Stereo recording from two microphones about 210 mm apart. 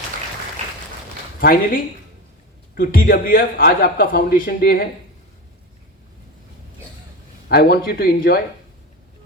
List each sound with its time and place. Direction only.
1.4 s a man's voice: 45° left (ahead or behind)
7.4 s a man's voice: 45° left (ahead or behind)